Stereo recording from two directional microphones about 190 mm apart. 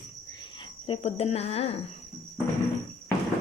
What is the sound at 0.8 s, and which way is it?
Speech, 30° left (ahead or behind).